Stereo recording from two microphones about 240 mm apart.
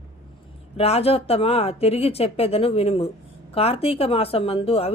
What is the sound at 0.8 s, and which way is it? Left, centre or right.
Speech, left.